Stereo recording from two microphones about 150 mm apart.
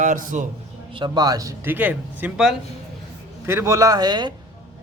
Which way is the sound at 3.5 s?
20° right (ahead or behind).